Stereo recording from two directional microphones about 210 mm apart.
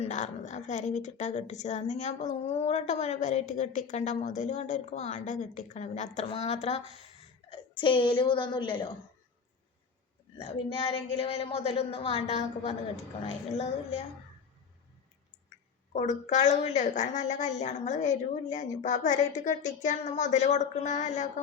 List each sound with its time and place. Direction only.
0.0 s a woman's voice: 35° left (ahead or behind)
10.4 s a woman's voice: 25° left (ahead or behind)
15.9 s speech: 35° left (ahead or behind)